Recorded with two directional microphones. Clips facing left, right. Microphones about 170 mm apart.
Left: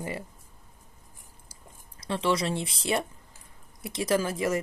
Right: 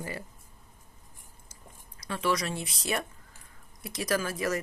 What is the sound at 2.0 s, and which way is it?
Speech, 25° left (ahead or behind).